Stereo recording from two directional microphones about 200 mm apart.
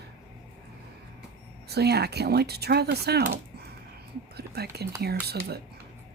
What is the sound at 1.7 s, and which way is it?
Speech, 55° right (ahead or behind).